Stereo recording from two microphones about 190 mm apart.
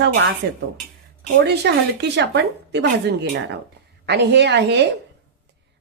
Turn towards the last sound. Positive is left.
turn(degrees=-65)  # may be behind; listen again after turning